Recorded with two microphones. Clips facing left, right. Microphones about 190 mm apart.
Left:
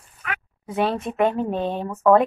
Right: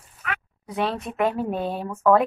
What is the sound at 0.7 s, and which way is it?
Speech, centre (ahead or behind).